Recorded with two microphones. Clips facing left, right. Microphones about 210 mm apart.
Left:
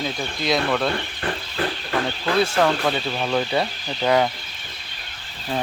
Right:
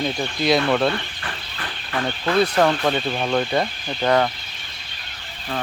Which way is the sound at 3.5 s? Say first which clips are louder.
Right 1 dB; 10° left (ahead or behind).